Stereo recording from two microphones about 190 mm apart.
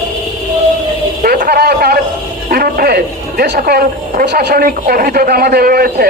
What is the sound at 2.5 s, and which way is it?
A woman's voice, 50° right (ahead or behind).